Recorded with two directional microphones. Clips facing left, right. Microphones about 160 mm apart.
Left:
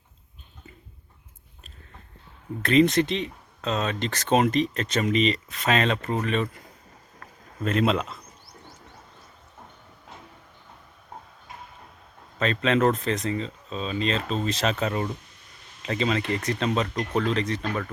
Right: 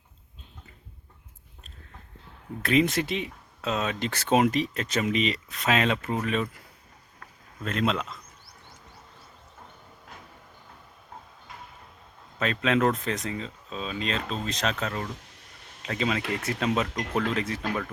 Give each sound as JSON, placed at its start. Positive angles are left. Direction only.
{"t": 2.6, "sound": "speech", "side_deg": -5}
{"t": 7.6, "sound": "speech", "side_deg": 5}
{"t": 12.4, "sound": "speech", "side_deg": -5}
{"t": 15.3, "sound": "a sound", "side_deg": -70}
{"t": 15.8, "sound": "speech", "side_deg": 0}